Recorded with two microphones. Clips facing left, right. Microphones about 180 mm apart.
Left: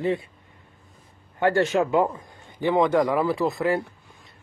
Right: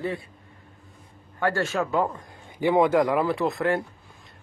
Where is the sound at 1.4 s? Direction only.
20° left (ahead or behind).